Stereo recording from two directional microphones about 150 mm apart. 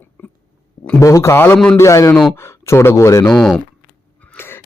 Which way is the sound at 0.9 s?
20° left (ahead or behind).